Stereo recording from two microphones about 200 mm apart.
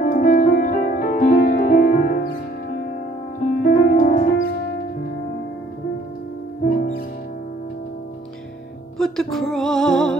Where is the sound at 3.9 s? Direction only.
45° left (ahead or behind).